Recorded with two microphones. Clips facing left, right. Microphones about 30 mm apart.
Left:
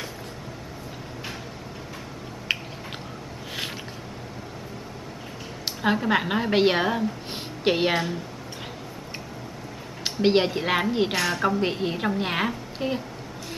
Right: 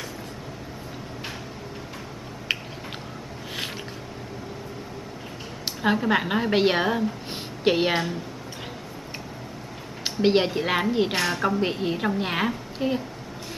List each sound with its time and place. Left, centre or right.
2.5 s a sound: centre
5.8 s a woman's voice: centre
10.0 s a woman's voice: centre